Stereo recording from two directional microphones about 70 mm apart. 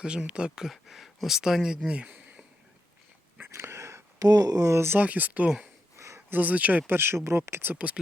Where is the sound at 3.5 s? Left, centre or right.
Right.